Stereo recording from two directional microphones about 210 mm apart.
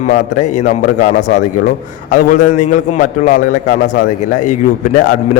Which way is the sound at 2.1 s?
35° left (ahead or behind).